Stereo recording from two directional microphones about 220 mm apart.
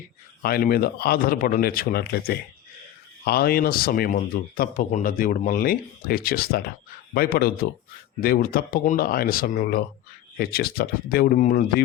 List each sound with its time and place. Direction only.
0.4 s speech: 45° left (ahead or behind)